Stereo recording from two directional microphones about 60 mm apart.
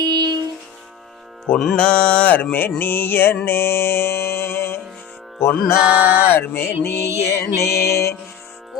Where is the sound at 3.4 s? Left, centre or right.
Left.